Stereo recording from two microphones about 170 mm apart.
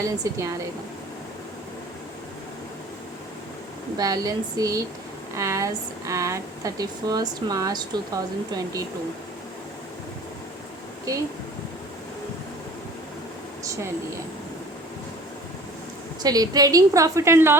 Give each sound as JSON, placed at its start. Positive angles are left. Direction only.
{"t": 0.0, "sound": "speech", "side_deg": -20}
{"t": 3.9, "sound": "speech", "side_deg": -20}
{"t": 11.1, "sound": "speech", "side_deg": -20}
{"t": 16.2, "sound": "speech", "side_deg": -20}